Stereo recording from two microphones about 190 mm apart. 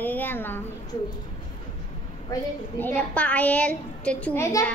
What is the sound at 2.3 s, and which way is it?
Speech, 20° left (ahead or behind).